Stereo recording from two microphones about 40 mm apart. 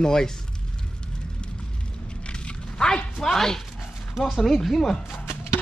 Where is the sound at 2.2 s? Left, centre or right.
Left.